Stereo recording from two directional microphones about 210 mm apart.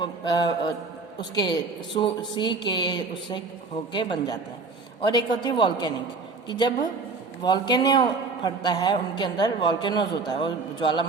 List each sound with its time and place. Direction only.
0.0 s a man's voice: 20° left (ahead or behind)